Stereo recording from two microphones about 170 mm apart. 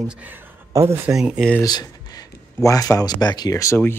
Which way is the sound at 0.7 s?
15° right (ahead or behind).